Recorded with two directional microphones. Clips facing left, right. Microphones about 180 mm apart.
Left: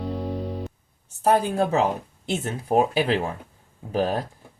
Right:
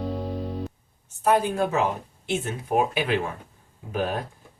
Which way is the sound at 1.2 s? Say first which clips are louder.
Left 1 dB; 35° left (ahead or behind).